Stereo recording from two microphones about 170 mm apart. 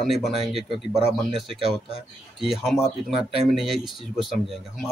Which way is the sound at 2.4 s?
Centre (ahead or behind).